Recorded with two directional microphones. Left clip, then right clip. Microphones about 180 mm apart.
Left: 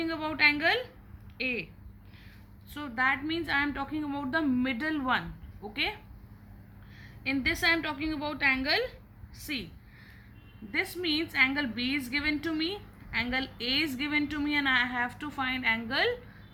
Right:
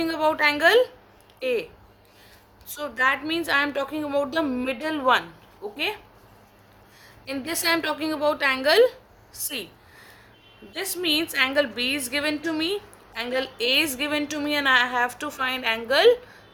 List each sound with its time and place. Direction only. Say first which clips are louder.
0.0 s a woman's voice: right 5 dB; 50° right (ahead or behind)
2.7 s a woman's voice: right 6 dB; 45° right (ahead or behind)
7.0 s a woman's voice: left 3 dB; 50° right (ahead or behind)
10.8 s a woman's voice: right 5 dB; 45° right (ahead or behind)